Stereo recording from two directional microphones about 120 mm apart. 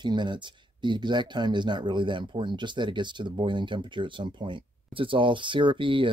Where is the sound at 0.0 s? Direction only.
40° right (ahead or behind).